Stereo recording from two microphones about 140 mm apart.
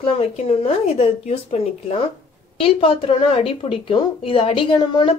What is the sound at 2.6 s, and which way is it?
A woman's voice, 40° left (ahead or behind).